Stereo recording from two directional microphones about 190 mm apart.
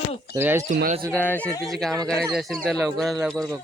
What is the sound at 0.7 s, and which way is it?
Speech, 50° right (ahead or behind).